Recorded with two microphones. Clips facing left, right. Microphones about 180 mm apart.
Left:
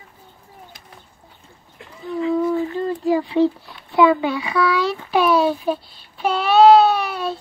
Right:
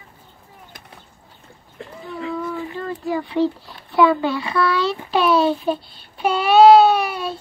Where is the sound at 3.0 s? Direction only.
20° left (ahead or behind).